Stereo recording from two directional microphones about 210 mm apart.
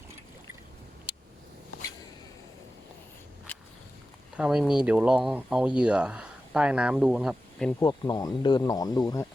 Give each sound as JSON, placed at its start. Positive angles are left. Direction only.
{"t": 4.4, "sound": "speech", "side_deg": -5}
{"t": 7.8, "sound": "speech", "side_deg": 20}